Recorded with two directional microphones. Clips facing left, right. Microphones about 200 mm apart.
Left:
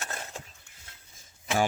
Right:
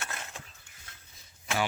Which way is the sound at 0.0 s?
35° left (ahead or behind).